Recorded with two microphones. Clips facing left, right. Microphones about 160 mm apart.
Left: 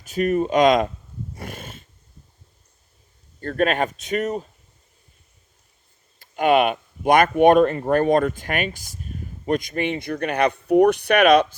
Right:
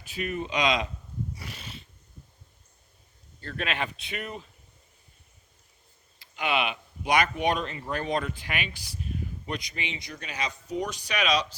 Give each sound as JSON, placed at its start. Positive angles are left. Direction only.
{"t": 0.0, "sound": "speech", "side_deg": 45}
{"t": 1.4, "sound": "dog", "side_deg": 50}
{"t": 3.4, "sound": "speech", "side_deg": 45}
{"t": 6.1, "sound": "speech", "side_deg": 50}